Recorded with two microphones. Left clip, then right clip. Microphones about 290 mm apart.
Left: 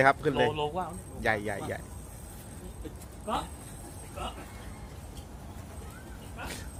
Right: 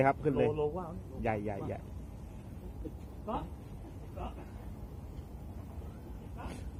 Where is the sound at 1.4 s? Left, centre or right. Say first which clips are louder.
Left 4 dB; centre.